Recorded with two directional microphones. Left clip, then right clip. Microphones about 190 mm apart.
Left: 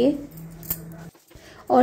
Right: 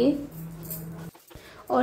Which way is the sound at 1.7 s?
20° left (ahead or behind).